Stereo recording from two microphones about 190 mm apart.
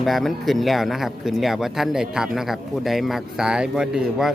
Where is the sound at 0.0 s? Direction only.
Centre (ahead or behind).